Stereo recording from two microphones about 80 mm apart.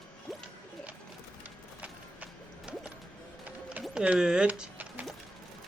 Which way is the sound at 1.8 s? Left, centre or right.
Centre.